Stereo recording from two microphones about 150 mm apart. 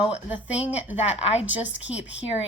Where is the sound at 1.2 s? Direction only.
45° left (ahead or behind).